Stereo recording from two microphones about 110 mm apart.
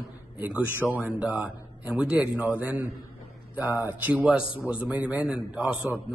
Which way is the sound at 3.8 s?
15° right (ahead or behind).